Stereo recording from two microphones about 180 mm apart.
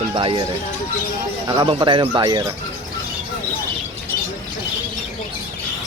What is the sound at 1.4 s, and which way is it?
Speech, 20° right (ahead or behind).